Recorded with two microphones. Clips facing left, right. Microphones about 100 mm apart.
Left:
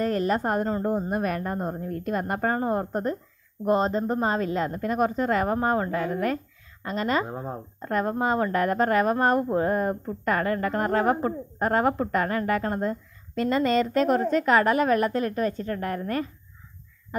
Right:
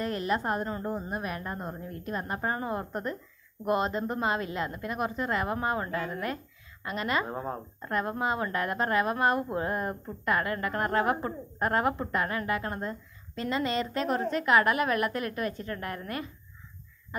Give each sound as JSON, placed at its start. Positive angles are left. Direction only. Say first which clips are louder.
{"t": 0.0, "sound": "a woman's voice", "louder": "left 5 dB", "side_deg": 40}
{"t": 7.2, "sound": "speech", "louder": "left 1 dB", "side_deg": 10}
{"t": 7.8, "sound": "a woman's voice", "louder": "left 5 dB", "side_deg": 40}